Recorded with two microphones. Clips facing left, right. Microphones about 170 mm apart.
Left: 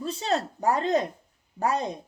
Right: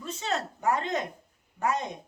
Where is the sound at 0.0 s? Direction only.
35° left (ahead or behind).